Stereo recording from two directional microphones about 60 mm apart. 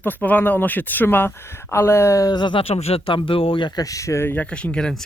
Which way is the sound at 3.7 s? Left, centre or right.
Left.